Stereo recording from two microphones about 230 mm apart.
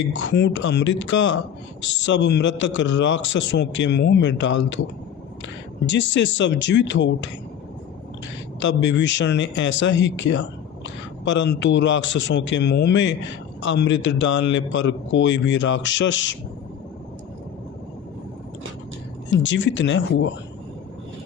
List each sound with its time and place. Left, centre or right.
0.1 s a man's voice: left
5.8 s a man's voice: left
8.5 s a man's voice: left
19.4 s a man's voice: left